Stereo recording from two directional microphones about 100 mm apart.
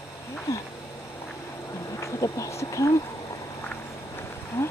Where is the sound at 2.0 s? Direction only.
30° left (ahead or behind).